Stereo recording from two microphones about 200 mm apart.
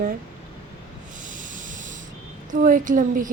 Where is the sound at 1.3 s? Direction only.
40° right (ahead or behind).